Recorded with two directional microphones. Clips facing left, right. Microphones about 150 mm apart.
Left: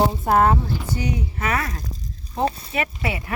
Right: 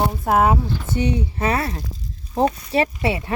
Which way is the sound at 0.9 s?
30° right (ahead or behind).